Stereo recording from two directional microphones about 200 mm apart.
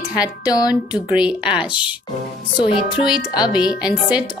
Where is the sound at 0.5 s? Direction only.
20° left (ahead or behind).